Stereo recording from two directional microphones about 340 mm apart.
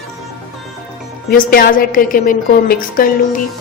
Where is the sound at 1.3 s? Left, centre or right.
Left.